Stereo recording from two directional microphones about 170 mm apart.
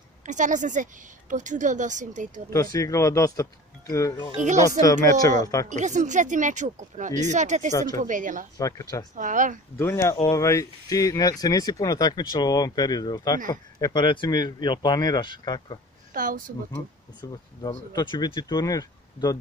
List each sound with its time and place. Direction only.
0.2 s speech: 45° right (ahead or behind)
2.5 s speech: 20° left (ahead or behind)
5.7 s speech: 45° right (ahead or behind)
7.7 s speech: 20° left (ahead or behind)
8.0 s speech: 50° right (ahead or behind)
8.5 s speech: 20° left (ahead or behind)
9.1 s speech: 50° right (ahead or behind)
9.8 s speech: 15° left (ahead or behind)
10.1 s speech: 30° left (ahead or behind)
10.4 s speech: 20° left (ahead or behind)
16.1 s speech: 50° right (ahead or behind)
17.2 s speech: 25° left (ahead or behind)